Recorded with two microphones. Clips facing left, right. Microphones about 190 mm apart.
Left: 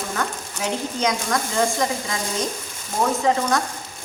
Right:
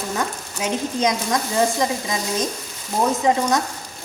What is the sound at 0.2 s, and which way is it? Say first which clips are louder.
Speech: right 1 dB; 20° right (ahead or behind).